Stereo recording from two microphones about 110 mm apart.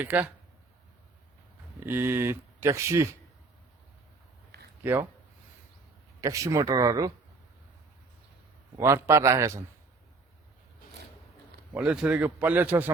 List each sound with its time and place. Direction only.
0.0 s a man's voice: 15° right (ahead or behind)
1.8 s speech: 20° right (ahead or behind)
4.8 s speech: 20° right (ahead or behind)
6.2 s speech: 30° right (ahead or behind)
8.8 s speech: 25° right (ahead or behind)
11.7 s a man's voice: 10° right (ahead or behind)